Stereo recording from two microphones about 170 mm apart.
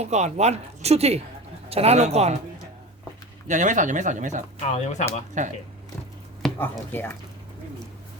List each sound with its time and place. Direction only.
0.0 s speech: 40° right (ahead or behind)
3.4 s speech: 45° right (ahead or behind)
4.6 s speech: 40° left (ahead or behind)
5.4 s speech: 45° right (ahead or behind)
6.6 s speech: 10° left (ahead or behind)